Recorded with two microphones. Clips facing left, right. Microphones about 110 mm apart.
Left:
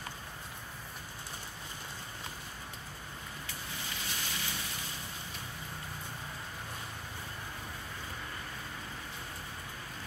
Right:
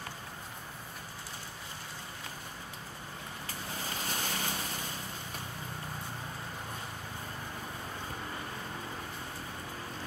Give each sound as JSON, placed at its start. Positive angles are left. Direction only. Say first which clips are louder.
{"t": 3.9, "sound": "boat", "louder": "right 5 dB", "side_deg": -45}